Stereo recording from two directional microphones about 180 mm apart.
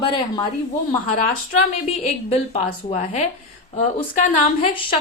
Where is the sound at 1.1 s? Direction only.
45° left (ahead or behind).